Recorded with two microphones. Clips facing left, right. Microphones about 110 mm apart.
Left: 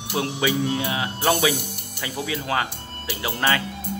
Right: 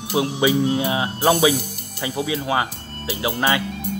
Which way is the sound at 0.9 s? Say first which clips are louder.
Right 4 dB; 30° right (ahead or behind).